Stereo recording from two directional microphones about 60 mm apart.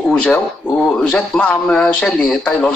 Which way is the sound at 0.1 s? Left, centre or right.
Centre.